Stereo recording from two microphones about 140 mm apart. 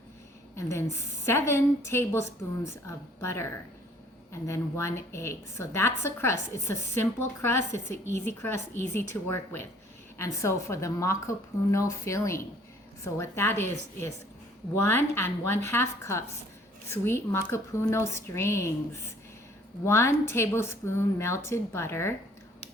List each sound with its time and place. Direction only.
0.5 s a woman's voice: 20° left (ahead or behind)
19.8 s a woman's voice: 20° left (ahead or behind)